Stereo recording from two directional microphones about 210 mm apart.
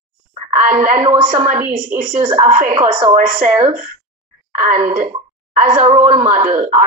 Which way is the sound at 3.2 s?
40° right (ahead or behind).